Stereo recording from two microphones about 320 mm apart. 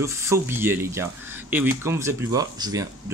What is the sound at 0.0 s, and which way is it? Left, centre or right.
Speech, centre.